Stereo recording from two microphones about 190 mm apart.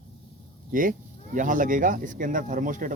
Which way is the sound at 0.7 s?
45° right (ahead or behind).